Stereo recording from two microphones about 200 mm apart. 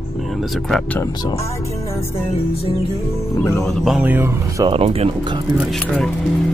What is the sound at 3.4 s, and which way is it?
Speech, 15° left (ahead or behind).